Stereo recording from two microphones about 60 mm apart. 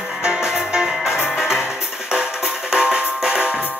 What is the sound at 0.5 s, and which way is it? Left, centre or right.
Music, centre.